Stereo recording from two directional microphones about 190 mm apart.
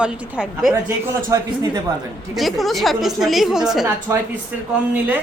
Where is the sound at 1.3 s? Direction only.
15° right (ahead or behind).